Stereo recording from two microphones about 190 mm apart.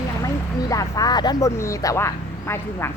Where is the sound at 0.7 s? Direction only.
20° left (ahead or behind).